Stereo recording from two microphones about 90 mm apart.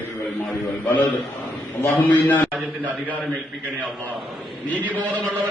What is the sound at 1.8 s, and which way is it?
Speech, 20° left (ahead or behind).